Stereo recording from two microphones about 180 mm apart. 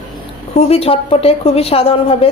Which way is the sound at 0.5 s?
35° left (ahead or behind).